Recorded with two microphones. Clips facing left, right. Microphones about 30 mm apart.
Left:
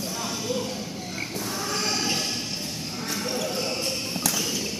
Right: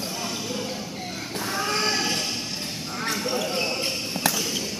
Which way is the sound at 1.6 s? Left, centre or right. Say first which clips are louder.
Right 4 dB; right.